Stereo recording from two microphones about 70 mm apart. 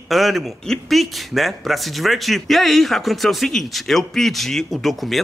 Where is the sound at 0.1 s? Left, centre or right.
Centre.